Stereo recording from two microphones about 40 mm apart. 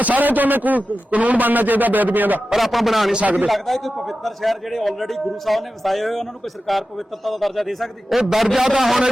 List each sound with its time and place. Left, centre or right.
0.0 s a man's voice: right
2.6 s a man's voice: centre